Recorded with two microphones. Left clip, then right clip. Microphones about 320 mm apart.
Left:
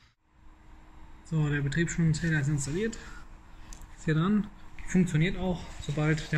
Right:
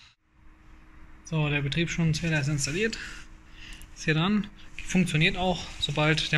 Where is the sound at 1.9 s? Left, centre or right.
Right.